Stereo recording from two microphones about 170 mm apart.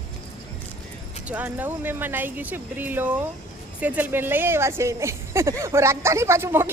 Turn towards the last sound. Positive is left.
turn(degrees=-15)  # may be behind; listen again after turning